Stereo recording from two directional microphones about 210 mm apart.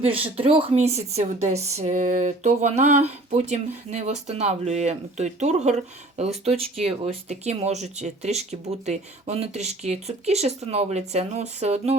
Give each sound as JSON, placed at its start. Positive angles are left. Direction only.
{"t": 0.0, "sound": "a woman's voice", "side_deg": -25}